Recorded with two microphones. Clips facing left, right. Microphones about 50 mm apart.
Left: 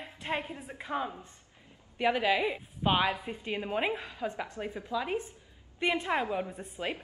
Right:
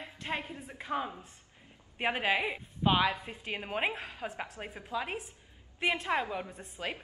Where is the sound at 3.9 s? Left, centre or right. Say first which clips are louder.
Left 1 dB; right.